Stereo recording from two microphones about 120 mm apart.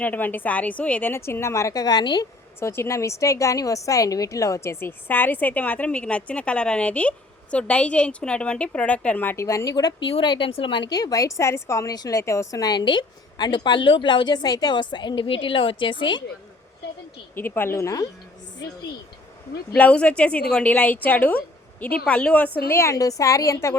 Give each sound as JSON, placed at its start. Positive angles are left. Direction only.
{"t": 0.0, "sound": "a woman's voice", "side_deg": 15}
{"t": 2.6, "sound": "a woman's voice", "side_deg": 20}
{"t": 17.3, "sound": "a woman's voice", "side_deg": 20}
{"t": 19.7, "sound": "a woman's voice", "side_deg": 10}
{"t": 22.7, "sound": "a woman's voice", "side_deg": 25}